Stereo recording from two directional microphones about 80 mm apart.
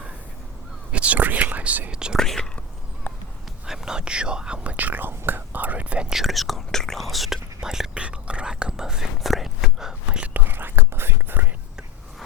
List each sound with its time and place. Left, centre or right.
0.9 s speech: centre
2.1 s speech: centre
3.7 s speech: centre
10.5 s whispering: right